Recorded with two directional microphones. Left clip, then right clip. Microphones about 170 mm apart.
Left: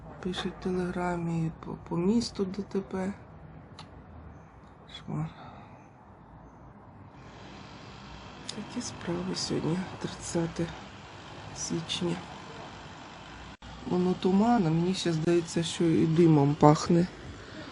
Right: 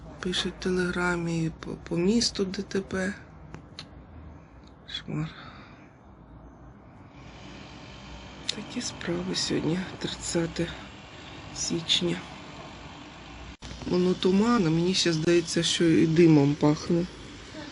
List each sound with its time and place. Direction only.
0.2 s speech: 15° left (ahead or behind)
4.9 s speech: 10° left (ahead or behind)
8.4 s speech: 10° left (ahead or behind)
13.9 s speech: 10° left (ahead or behind)
16.6 s speech: 30° left (ahead or behind)